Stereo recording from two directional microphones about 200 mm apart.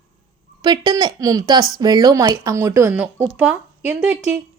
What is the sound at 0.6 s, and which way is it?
A woman's voice, 20° right (ahead or behind).